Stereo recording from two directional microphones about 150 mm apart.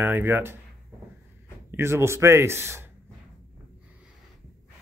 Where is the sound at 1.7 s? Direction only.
15° right (ahead or behind).